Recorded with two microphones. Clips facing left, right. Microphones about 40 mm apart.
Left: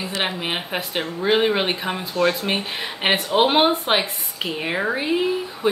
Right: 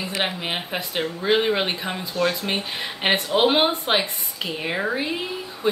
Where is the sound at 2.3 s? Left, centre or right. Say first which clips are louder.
Left 2 dB; centre.